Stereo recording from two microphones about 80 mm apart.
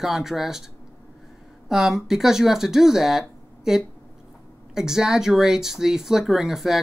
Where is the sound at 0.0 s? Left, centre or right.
Centre.